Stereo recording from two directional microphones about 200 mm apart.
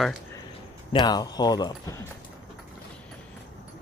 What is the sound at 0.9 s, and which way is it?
Speech, 20° left (ahead or behind).